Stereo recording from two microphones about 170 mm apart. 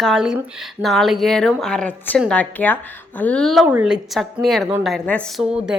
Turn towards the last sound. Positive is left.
turn(degrees=-5)  # may be behind; listen again after turning